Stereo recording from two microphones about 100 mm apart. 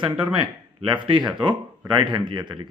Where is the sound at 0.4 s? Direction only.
55° right (ahead or behind).